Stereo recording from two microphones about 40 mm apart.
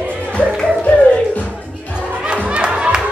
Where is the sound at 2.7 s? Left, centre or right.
Right.